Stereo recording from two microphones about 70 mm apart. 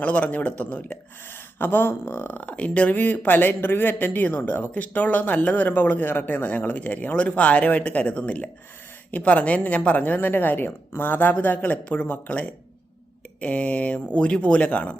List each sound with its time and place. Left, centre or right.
0.0 s speech: left